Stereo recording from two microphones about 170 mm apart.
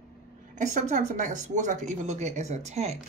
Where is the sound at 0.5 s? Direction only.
45° right (ahead or behind).